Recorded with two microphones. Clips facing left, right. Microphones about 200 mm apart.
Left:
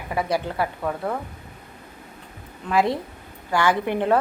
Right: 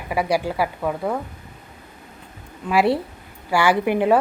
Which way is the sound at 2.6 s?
10° right (ahead or behind).